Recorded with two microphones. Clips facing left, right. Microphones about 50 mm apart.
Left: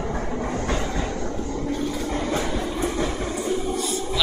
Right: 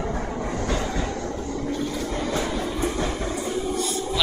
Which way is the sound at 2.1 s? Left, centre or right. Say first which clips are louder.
Left 2 dB; left.